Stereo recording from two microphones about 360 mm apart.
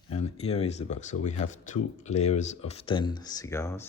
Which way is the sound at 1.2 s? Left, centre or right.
Centre.